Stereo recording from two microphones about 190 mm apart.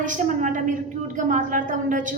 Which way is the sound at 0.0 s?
45° right (ahead or behind).